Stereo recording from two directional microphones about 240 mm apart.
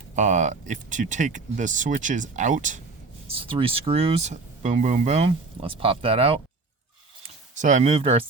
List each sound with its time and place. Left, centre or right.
0.2 s speech: right